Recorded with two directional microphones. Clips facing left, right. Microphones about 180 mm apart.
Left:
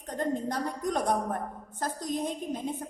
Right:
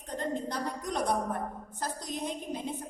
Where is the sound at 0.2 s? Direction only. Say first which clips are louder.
Left 4 dB; 50° left (ahead or behind).